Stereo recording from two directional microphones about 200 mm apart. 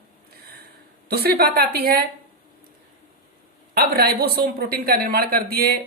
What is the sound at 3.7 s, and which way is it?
Speech, 50° right (ahead or behind).